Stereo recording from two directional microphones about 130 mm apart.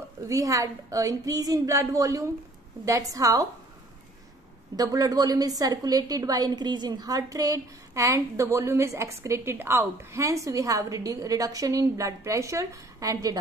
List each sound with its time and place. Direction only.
0.3 s a woman's voice: 25° right (ahead or behind)
4.7 s a woman's voice: 25° right (ahead or behind)